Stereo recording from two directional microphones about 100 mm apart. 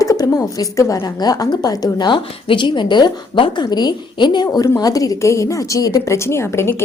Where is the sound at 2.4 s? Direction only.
55° left (ahead or behind).